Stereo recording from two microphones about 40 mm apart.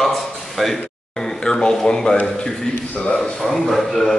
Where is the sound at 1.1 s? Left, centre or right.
Centre.